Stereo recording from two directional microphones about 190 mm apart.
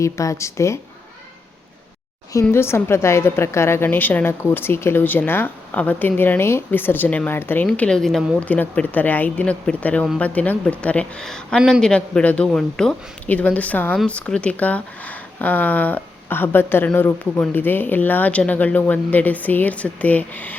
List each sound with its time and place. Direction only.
0.0 s a woman's voice: 15° left (ahead or behind)
2.4 s a woman's voice: 15° left (ahead or behind)